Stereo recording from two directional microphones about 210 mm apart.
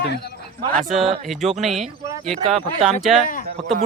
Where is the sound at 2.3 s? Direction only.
30° right (ahead or behind).